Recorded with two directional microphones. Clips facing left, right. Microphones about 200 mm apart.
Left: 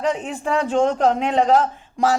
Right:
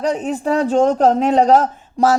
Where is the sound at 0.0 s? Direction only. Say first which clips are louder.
Right 4 dB; 40° right (ahead or behind).